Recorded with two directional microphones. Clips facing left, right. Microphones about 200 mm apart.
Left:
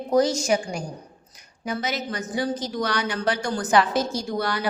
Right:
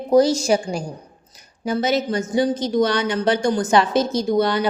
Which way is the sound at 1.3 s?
30° right (ahead or behind).